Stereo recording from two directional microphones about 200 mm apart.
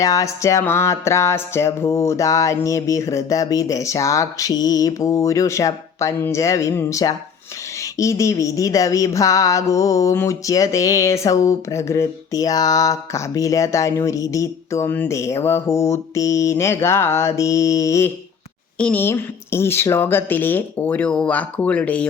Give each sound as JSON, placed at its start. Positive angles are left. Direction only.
{"t": 0.0, "sound": "speech", "side_deg": 15}